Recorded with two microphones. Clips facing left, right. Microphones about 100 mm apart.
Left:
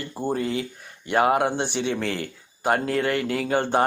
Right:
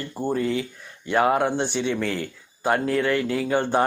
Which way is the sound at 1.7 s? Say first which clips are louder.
Right 1 dB; 60° left (ahead or behind).